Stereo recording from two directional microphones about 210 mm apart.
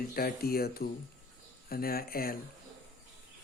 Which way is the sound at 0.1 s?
45° left (ahead or behind).